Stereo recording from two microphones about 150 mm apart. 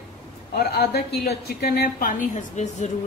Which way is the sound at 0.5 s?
90° left.